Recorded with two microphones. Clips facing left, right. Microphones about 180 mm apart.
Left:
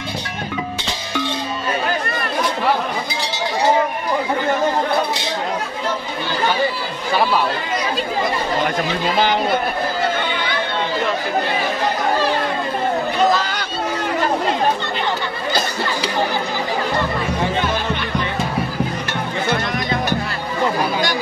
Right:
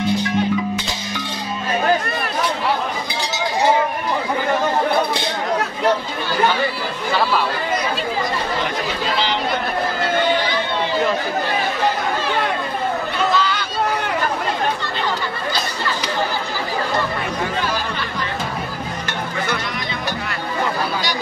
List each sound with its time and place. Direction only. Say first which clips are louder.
9.1 s speech: left 5 dB; 50° left (ahead or behind)
13.4 s chatter: right 3 dB; 45° left (ahead or behind)